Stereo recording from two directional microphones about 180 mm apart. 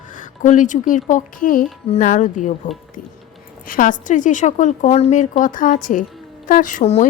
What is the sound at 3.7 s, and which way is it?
A woman's voice, 50° left (ahead or behind).